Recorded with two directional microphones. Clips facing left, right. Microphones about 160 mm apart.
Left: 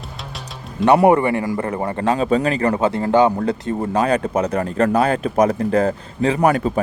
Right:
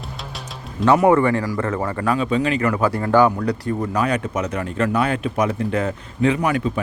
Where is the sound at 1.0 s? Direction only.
15° left (ahead or behind).